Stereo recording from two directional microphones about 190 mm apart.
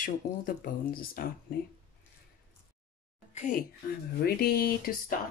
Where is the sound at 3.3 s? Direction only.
45° left (ahead or behind).